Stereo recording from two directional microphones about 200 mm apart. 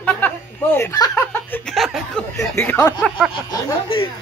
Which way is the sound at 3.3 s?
20° left (ahead or behind).